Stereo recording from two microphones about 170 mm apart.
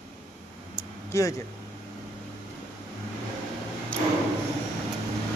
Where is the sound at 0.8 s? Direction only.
20° left (ahead or behind).